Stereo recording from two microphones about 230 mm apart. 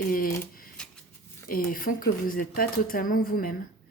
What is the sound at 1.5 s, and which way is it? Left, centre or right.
A woman's voice, left.